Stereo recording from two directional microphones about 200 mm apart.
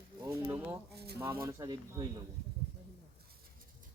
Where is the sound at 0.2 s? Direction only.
15° right (ahead or behind).